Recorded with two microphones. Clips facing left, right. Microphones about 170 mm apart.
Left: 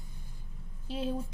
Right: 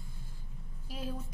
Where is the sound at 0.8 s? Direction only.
25° left (ahead or behind).